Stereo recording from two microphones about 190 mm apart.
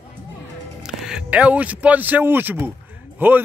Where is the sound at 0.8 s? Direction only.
5° right (ahead or behind).